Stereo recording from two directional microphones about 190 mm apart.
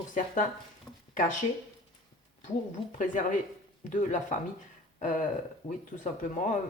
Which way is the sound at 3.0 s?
45° left (ahead or behind).